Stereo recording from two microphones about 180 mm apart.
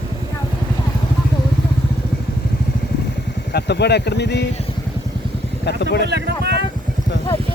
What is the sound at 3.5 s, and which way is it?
Speech, 70° left (ahead or behind).